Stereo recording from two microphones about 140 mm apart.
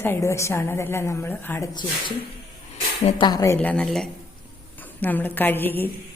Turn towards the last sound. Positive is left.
turn(degrees=15)  # may be behind; listen again after turning